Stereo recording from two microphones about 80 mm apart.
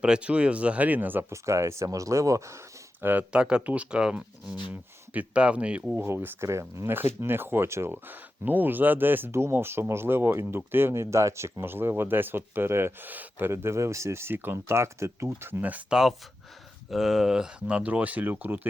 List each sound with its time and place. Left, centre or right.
0.0 s speech: centre
1.3 s speech: right
3.0 s speech: right
3.3 s speech: centre
6.0 s speech: right
15.9 s speech: centre; by 18.6 s right